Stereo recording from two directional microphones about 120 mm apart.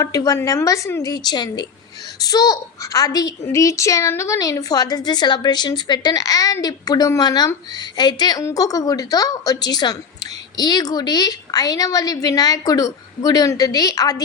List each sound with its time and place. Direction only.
0.0 s a woman's voice: 30° left (ahead or behind)